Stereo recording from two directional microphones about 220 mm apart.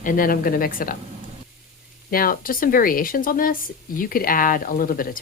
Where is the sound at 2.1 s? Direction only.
40° left (ahead or behind).